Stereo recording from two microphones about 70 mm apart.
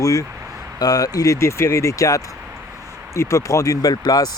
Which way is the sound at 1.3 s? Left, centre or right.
Left.